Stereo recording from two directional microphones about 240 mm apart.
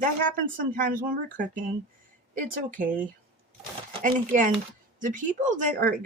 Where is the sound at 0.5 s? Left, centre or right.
Right.